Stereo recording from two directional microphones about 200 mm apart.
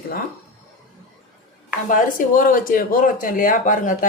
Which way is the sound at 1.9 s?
45° left (ahead or behind).